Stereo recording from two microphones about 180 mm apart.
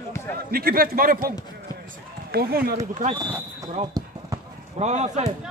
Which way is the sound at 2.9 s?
40° right (ahead or behind).